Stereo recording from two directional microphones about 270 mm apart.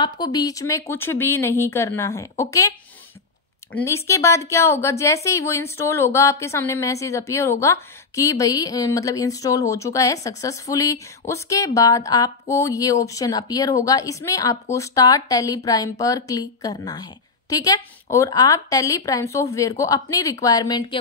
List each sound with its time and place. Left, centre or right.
0.0 s speech: centre
3.7 s speech: centre